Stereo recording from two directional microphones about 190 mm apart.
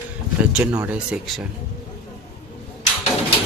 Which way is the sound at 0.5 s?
10° right (ahead or behind).